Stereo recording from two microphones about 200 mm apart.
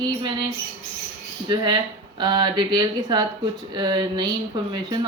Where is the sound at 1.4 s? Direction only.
20° right (ahead or behind).